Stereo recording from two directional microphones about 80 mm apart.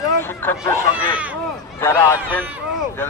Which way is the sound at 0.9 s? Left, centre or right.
Centre.